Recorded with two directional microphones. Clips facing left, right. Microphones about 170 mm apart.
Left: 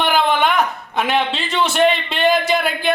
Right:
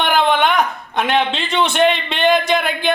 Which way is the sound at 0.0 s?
Centre (ahead or behind).